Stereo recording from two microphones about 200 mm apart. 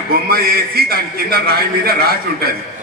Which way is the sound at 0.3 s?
50° right (ahead or behind).